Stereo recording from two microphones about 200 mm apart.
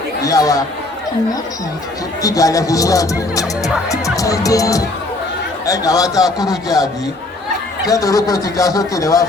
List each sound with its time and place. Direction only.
0.2 s speech: 15° left (ahead or behind)
2.2 s speech: 15° left (ahead or behind)